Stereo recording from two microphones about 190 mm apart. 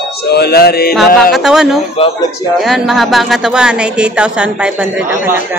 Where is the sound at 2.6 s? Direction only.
Centre (ahead or behind).